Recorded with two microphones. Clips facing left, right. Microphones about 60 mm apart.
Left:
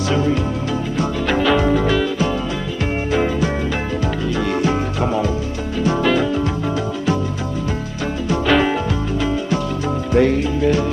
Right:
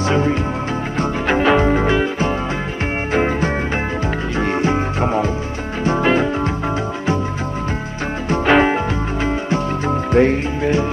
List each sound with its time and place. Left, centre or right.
0.1 s music: right
8.3 s music: right